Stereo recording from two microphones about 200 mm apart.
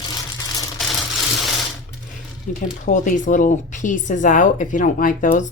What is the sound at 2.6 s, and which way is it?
Speech, 40° left (ahead or behind).